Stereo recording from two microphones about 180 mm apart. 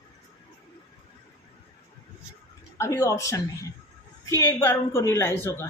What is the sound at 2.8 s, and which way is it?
A woman's voice, 15° left (ahead or behind).